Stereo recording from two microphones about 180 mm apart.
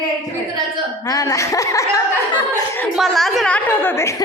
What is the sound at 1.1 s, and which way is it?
A woman's voice, 20° left (ahead or behind).